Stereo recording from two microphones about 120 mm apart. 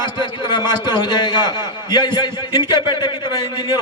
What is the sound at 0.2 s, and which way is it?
A man's voice, 40° left (ahead or behind).